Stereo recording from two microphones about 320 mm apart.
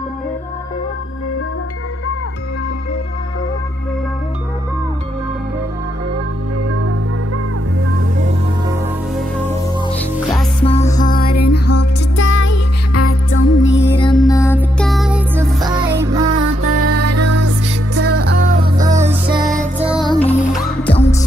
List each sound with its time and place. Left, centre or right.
9.9 s music: centre
10.6 s music: centre
11.4 s music: left
13.8 s music: centre
16.3 s music: right
17.4 s music: right
18.4 s music: centre
19.9 s music: centre
20.3 s music: centre